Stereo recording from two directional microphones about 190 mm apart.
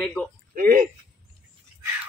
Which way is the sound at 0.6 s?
45° right (ahead or behind).